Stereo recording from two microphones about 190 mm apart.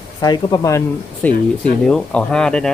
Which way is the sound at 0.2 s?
20° left (ahead or behind).